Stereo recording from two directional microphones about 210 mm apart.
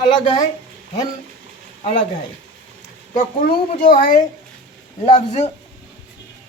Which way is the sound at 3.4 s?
40° left (ahead or behind).